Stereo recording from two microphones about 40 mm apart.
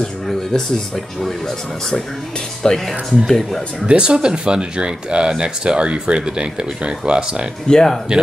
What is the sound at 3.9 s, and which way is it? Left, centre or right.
Speech, right.